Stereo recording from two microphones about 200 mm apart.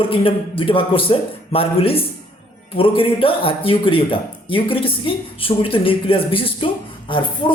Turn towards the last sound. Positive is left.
turn(degrees=25)  # may be behind; listen again after turning